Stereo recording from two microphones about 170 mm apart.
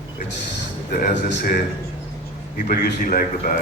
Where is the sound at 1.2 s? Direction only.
60° left (ahead or behind).